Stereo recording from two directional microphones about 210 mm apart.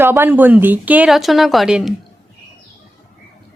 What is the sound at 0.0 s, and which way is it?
A woman's voice, 10° right (ahead or behind).